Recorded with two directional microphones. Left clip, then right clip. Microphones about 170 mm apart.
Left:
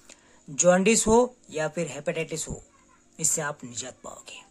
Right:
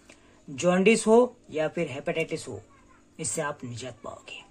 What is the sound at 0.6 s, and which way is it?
Speech, 25° left (ahead or behind).